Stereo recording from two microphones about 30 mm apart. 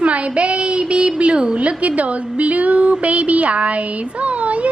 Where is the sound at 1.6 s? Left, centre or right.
Right.